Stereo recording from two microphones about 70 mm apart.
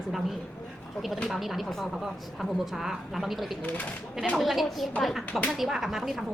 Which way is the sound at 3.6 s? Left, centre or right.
Left.